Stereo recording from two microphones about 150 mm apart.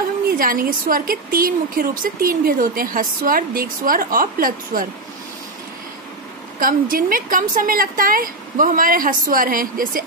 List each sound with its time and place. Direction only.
0.4 s a woman's voice: 70° right (ahead or behind)
6.6 s a woman's voice: 70° right (ahead or behind)